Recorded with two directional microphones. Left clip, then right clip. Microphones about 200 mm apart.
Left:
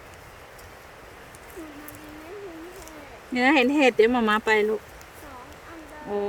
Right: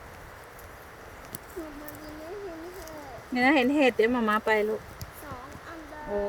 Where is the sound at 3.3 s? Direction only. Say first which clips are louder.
Left 3 dB; 35° left (ahead or behind).